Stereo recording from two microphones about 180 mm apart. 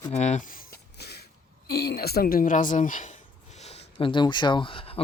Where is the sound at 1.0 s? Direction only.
65° left (ahead or behind).